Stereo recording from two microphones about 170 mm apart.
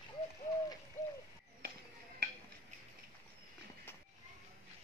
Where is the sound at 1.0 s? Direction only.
45° left (ahead or behind).